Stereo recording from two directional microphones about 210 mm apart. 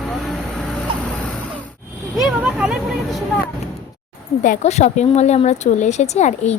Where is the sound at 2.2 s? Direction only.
Centre (ahead or behind).